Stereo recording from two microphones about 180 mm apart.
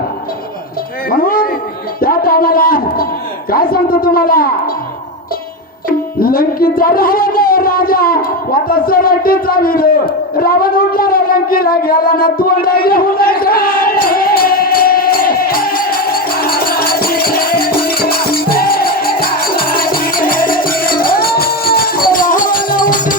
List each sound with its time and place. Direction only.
1.1 s a man's voice: 55° left (ahead or behind)
6.1 s music: 55° left (ahead or behind)